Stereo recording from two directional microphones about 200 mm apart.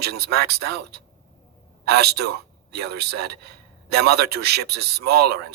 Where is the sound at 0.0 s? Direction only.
55° right (ahead or behind).